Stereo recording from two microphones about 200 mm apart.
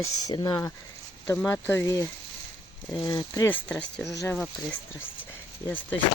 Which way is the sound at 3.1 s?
20° left (ahead or behind).